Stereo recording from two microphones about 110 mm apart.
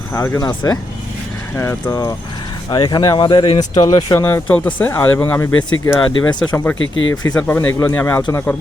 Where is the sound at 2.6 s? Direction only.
40° left (ahead or behind).